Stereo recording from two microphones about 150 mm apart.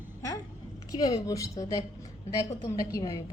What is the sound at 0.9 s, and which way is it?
A woman's voice, 25° left (ahead or behind).